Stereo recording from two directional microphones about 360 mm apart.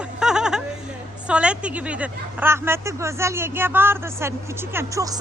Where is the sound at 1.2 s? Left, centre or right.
Centre.